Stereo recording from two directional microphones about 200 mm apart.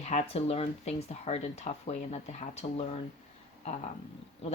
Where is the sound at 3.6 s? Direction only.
35° left (ahead or behind).